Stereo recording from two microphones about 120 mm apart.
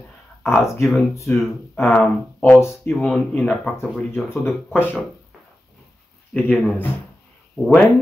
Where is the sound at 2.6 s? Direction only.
20° left (ahead or behind).